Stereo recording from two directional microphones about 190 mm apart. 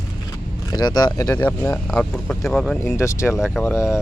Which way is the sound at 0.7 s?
20° left (ahead or behind).